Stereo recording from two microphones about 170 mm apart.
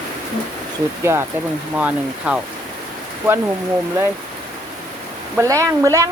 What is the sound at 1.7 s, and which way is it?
Speech, 5° right (ahead or behind).